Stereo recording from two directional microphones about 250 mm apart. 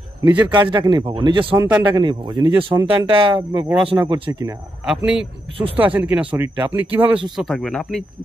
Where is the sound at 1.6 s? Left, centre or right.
Centre.